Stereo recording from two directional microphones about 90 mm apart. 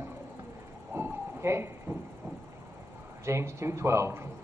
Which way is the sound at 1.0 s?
30° right (ahead or behind).